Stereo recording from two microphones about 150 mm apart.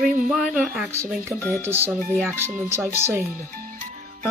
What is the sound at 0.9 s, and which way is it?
Speech, 20° right (ahead or behind).